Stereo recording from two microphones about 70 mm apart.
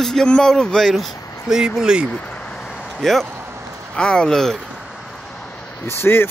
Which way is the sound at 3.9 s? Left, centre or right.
Centre.